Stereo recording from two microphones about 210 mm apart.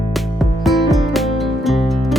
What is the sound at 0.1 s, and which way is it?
Music, centre (ahead or behind).